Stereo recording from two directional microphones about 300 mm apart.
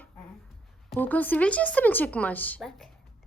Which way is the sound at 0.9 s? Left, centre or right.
Centre.